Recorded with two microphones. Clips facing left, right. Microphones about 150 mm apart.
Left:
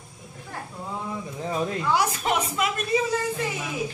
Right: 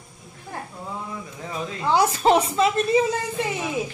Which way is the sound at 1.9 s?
30° right (ahead or behind).